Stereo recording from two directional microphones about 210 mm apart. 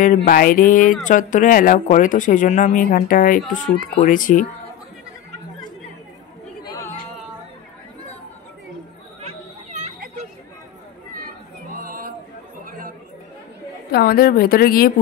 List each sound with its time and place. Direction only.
0.0 s speech: 40° left (ahead or behind)
6.6 s chatter: 15° left (ahead or behind)
11.1 s chatter: 45° right (ahead or behind)
13.9 s speech: 45° left (ahead or behind)